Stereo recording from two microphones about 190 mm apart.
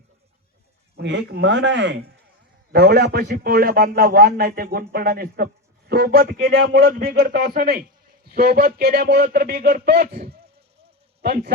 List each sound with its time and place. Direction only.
0.9 s speech: 65° right (ahead or behind)
2.7 s a man's voice: 55° right (ahead or behind)
11.2 s a man's voice: 55° right (ahead or behind)